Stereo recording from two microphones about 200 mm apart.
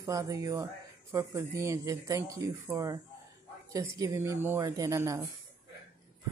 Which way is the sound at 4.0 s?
15° right (ahead or behind).